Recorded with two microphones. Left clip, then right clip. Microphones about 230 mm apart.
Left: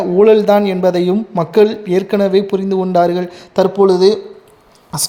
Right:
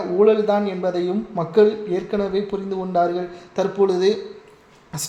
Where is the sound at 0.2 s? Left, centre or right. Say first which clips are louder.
Left 7 dB; left.